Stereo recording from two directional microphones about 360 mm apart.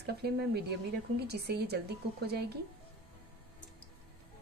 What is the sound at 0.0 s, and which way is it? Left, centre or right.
A woman's voice, right.